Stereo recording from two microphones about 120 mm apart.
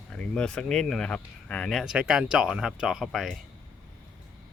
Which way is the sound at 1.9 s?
5° right (ahead or behind).